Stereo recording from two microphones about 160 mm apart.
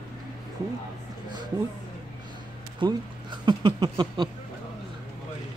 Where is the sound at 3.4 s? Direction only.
25° right (ahead or behind).